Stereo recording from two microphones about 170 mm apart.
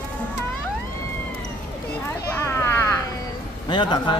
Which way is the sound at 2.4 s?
15° left (ahead or behind).